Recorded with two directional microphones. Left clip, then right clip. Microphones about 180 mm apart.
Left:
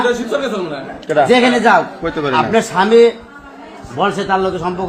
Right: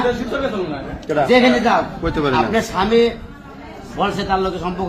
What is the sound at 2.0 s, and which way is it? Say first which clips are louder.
Speech: left 1 dB; 20° right (ahead or behind).